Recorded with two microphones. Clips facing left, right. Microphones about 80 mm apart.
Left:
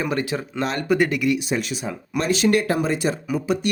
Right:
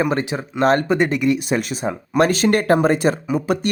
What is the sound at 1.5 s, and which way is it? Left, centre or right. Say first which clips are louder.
Speech: right 4 dB; right.